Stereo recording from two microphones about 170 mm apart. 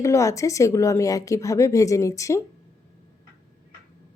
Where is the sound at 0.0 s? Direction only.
15° left (ahead or behind).